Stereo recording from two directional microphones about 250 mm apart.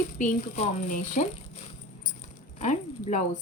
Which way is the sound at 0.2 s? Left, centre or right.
Left.